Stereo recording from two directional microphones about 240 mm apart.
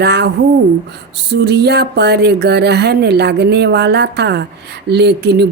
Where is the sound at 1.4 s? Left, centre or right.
Right.